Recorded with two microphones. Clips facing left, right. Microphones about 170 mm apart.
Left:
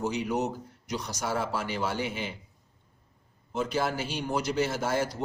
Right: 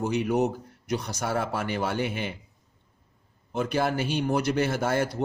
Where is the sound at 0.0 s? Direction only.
55° right (ahead or behind).